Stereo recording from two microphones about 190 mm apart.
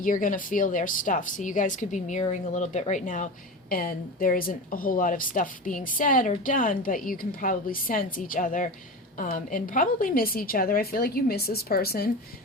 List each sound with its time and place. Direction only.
0.0 s a woman's voice: 45° left (ahead or behind)